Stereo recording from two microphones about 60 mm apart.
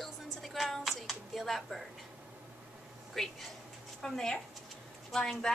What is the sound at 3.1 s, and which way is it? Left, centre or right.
A woman's voice, centre.